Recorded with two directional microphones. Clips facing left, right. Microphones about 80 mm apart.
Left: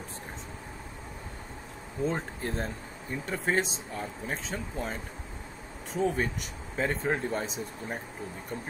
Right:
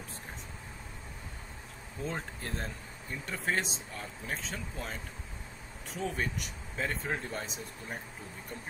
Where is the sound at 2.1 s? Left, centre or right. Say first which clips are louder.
Left 5 dB; centre.